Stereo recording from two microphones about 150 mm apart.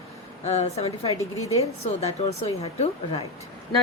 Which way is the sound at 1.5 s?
45° left (ahead or behind).